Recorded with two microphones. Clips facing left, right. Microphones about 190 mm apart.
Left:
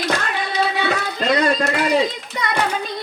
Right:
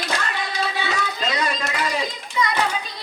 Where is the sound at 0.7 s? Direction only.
60° left (ahead or behind).